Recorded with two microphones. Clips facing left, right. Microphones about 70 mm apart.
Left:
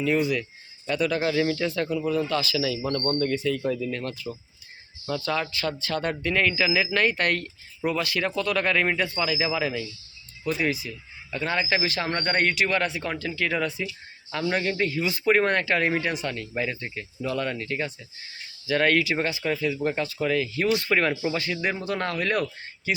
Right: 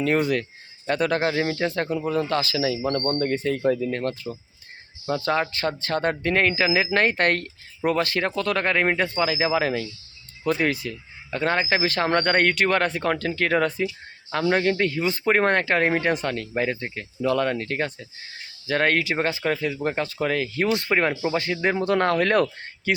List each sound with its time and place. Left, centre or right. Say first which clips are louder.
0.0 s speech: right 2 dB; right
18.7 s speech: even; right
21.8 s speech: right 7 dB; right